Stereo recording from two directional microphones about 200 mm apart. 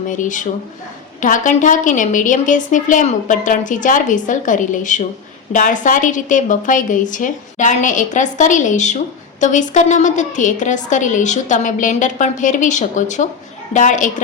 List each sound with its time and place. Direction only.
0.1 s a woman's voice: 40° left (ahead or behind)